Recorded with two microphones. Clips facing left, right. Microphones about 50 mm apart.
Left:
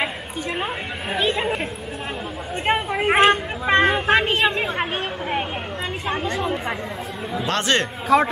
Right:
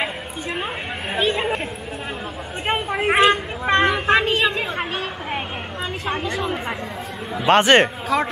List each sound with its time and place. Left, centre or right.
0.0 s chatter: centre
1.1 s speech: centre
2.6 s a sound: centre
4.6 s chatter: centre
7.3 s speech: right
8.1 s a man's voice: centre